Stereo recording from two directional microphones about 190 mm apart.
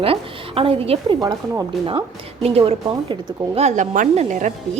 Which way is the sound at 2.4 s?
30° right (ahead or behind).